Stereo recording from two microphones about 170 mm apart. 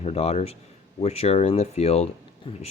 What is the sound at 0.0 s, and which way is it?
Speech, 40° left (ahead or behind).